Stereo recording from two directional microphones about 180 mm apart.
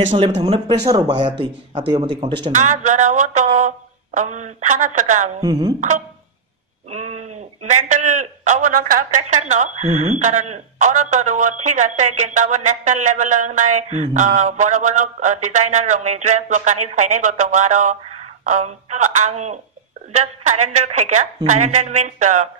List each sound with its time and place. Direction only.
0.1 s a man's voice: 40° right (ahead or behind)
0.4 s speech: 25° right (ahead or behind)
2.5 s speech: 40° right (ahead or behind)
5.4 s speech: 20° right (ahead or behind)
5.8 s a man's voice: 40° right (ahead or behind)